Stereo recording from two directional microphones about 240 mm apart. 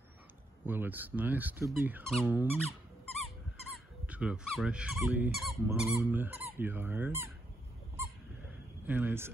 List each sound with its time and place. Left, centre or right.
0.7 s speech: centre
4.0 s speech: centre
8.8 s speech: centre